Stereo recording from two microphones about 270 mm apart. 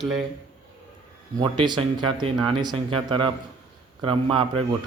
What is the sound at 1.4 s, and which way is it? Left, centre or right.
Speech, centre.